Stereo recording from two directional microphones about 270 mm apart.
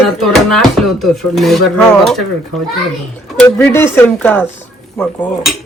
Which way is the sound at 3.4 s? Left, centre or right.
Centre.